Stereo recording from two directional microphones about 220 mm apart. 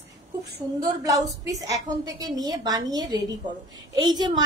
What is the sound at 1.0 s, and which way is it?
A woman's voice, 15° right (ahead or behind).